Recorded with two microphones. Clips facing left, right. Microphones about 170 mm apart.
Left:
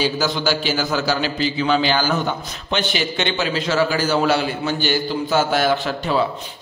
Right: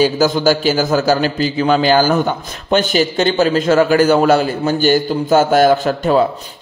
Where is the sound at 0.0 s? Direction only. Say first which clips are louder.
Right 8 dB; 45° right (ahead or behind).